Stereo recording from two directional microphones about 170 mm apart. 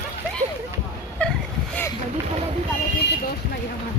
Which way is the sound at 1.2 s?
10° left (ahead or behind).